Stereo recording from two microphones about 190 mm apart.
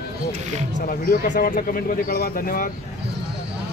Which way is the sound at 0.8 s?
50° left (ahead or behind).